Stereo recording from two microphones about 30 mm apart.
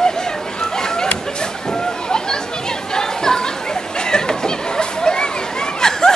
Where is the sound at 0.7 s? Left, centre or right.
Left.